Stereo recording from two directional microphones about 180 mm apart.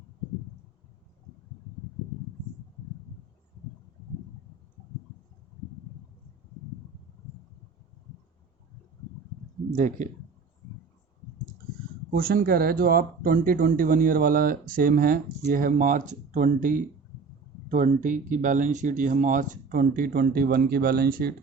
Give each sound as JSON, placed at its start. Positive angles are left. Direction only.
{"t": 9.6, "sound": "speech", "side_deg": -45}
{"t": 12.1, "sound": "speech", "side_deg": -55}